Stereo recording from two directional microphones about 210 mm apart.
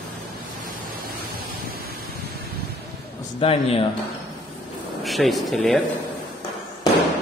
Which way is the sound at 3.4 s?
25° left (ahead or behind).